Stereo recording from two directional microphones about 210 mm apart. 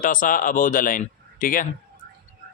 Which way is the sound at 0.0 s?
40° left (ahead or behind).